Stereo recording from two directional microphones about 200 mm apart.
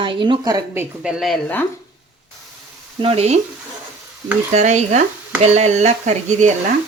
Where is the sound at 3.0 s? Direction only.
30° right (ahead or behind).